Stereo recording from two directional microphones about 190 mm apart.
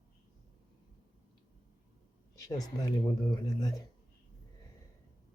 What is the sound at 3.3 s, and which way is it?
Speech, 20° left (ahead or behind).